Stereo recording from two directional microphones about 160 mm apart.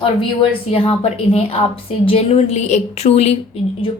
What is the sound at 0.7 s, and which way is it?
A woman's voice, 35° left (ahead or behind).